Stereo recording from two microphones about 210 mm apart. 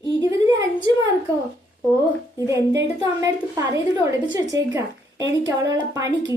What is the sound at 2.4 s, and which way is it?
A woman's voice, 15° right (ahead or behind).